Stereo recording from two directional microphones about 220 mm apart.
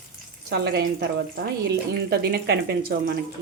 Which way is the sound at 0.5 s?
45° right (ahead or behind).